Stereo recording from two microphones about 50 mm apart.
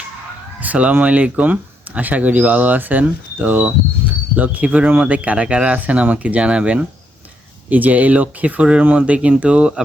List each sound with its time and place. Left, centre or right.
0.6 s speech: right